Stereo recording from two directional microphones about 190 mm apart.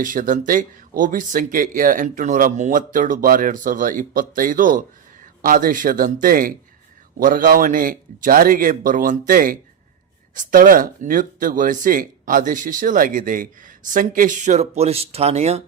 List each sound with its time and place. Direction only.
0.0 s speech: 45° right (ahead or behind)